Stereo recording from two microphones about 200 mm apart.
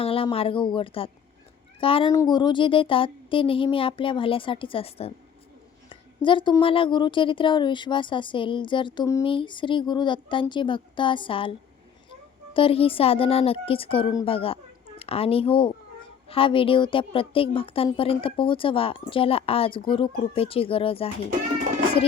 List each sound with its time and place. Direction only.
0.0 s a woman's voice: 25° left (ahead or behind)
12.5 s a woman's voice: 30° left (ahead or behind)